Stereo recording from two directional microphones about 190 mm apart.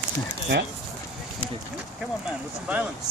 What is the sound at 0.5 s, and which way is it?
Speech, 60° right (ahead or behind).